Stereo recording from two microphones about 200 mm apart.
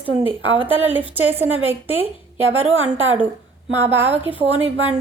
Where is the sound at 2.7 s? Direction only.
75° right (ahead or behind).